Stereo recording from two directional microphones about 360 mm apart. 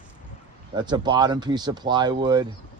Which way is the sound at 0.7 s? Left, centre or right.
Centre.